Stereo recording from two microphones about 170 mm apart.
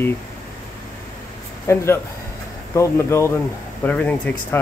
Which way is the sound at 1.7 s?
15° left (ahead or behind).